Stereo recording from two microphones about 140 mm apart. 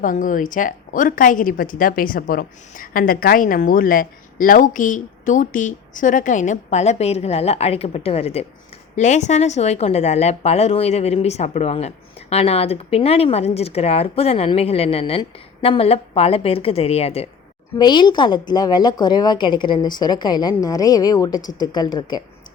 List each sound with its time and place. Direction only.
0.0 s a woman's voice: 70° left (ahead or behind); by 8.4 s 45° left (ahead or behind)
9.0 s a woman's voice: 60° left (ahead or behind)
17.7 s a woman's voice: 30° left (ahead or behind)